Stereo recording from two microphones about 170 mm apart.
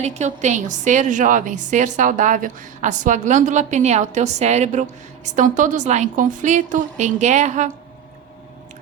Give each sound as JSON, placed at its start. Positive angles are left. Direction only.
{"t": 0.0, "sound": "a woman's voice", "side_deg": -40}